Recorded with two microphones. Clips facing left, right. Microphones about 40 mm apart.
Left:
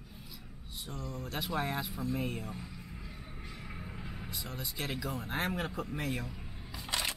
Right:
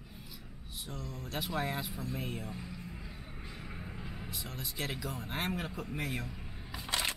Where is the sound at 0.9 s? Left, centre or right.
Centre.